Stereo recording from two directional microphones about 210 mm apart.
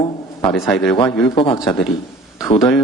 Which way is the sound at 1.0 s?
25° left (ahead or behind).